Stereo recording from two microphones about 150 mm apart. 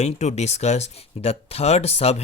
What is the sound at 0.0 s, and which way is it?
Speech, 45° left (ahead or behind).